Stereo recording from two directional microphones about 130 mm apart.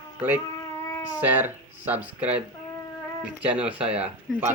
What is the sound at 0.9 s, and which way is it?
Cat, 30° left (ahead or behind).